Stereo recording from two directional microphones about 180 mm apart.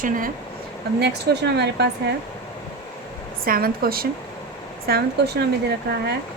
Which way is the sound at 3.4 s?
55° right (ahead or behind).